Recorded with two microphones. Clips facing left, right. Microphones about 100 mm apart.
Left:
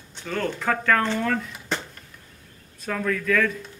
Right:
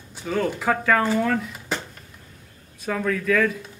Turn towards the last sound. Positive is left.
turn(degrees=-5)  # may be behind; listen again after turning